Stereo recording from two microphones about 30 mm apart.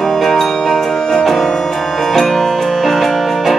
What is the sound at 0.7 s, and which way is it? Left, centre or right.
Music, centre.